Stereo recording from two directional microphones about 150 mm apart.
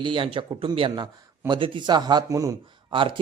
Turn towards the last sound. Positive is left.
turn(degrees=-35)  # may be behind; listen again after turning